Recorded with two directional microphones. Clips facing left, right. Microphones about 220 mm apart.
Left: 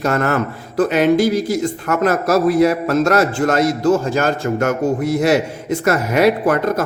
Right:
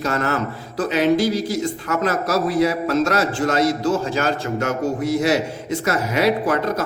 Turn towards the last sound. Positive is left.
turn(degrees=55)  # may be behind; listen again after turning